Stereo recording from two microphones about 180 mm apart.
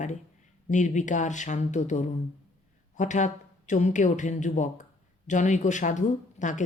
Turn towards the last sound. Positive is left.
turn(degrees=45)  # may be behind; listen again after turning